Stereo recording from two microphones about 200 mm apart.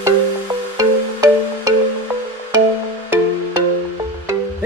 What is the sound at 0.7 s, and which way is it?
Music, 15° right (ahead or behind).